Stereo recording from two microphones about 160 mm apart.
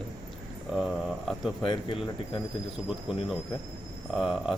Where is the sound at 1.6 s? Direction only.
30° left (ahead or behind).